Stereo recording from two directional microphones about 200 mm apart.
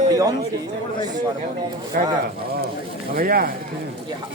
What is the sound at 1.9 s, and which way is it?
Speech, 50° right (ahead or behind).